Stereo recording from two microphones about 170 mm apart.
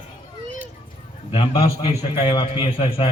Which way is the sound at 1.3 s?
30° left (ahead or behind).